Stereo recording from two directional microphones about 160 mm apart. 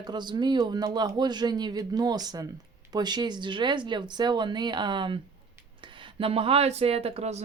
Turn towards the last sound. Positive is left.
turn(degrees=-45)  # may be behind; listen again after turning